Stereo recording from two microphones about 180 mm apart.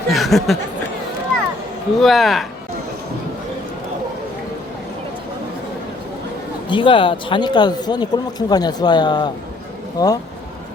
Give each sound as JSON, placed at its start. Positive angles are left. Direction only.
{"t": 0.1, "sound": "a sound", "side_deg": 0}
{"t": 2.0, "sound": "speech", "side_deg": 0}
{"t": 6.7, "sound": "speech", "side_deg": 30}